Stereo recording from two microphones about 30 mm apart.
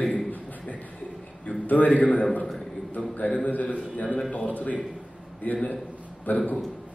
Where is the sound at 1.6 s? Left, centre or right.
Left.